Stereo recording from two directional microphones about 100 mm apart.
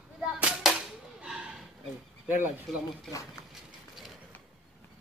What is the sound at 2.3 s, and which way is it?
Speech, 20° right (ahead or behind).